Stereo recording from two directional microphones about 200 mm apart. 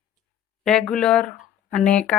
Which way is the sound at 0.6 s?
5° left (ahead or behind).